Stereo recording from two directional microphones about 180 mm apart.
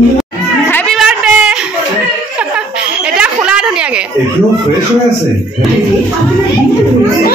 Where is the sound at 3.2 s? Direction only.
5° right (ahead or behind).